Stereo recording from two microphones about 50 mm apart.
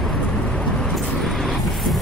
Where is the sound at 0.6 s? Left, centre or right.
Centre.